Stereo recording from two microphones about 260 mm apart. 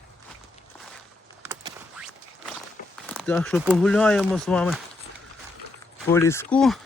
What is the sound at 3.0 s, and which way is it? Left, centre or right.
Speech, centre.